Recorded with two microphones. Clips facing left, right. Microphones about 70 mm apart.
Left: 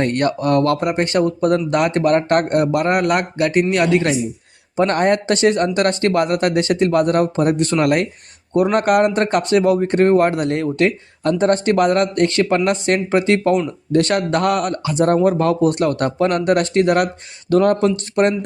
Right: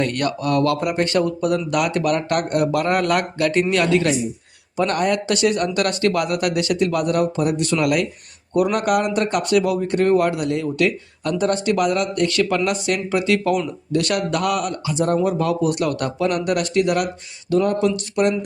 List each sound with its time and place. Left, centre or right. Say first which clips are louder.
0.0 s speech: left 4 dB; left
17.5 s speech: left 4 dB; left